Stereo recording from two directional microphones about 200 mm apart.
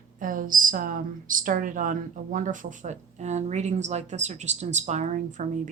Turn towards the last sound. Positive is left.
turn(degrees=-40)  # may be behind; listen again after turning